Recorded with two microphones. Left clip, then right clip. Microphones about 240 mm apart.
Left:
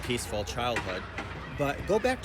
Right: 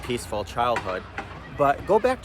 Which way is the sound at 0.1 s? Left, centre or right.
Centre.